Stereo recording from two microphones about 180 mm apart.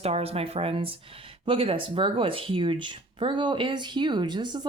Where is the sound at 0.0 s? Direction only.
35° right (ahead or behind).